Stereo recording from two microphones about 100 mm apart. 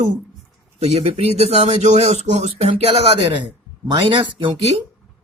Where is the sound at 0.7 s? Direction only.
90° right; by 3.4 s 70° right (ahead or behind).